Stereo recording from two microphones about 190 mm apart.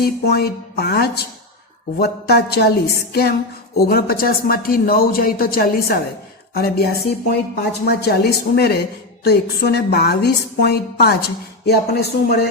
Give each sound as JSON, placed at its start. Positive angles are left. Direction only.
{"t": 0.0, "sound": "a woman's voice", "side_deg": 55}